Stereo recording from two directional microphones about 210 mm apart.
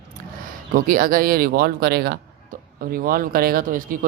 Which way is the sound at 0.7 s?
40° right (ahead or behind).